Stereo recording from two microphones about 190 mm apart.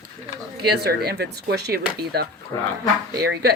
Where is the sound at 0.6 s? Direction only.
55° right (ahead or behind).